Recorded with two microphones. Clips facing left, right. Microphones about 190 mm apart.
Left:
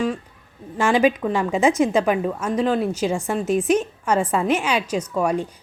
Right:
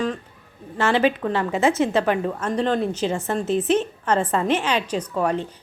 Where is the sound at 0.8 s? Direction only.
15° left (ahead or behind).